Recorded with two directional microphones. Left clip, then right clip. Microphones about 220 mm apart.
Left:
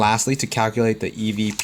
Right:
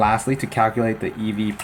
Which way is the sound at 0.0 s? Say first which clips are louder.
Even; 50° left (ahead or behind).